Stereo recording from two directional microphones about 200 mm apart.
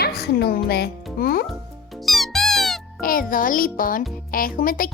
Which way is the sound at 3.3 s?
45° left (ahead or behind).